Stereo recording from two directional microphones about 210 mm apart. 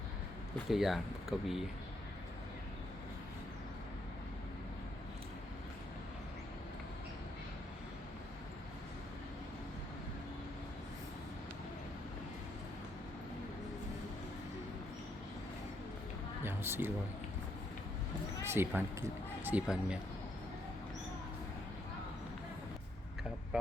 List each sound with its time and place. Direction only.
0.7 s speech: centre (ahead or behind)
16.4 s a sound: 10° right (ahead or behind)
18.4 s speech: 10° right (ahead or behind)